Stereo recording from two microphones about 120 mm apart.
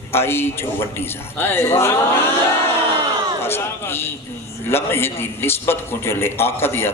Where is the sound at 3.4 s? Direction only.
20° left (ahead or behind).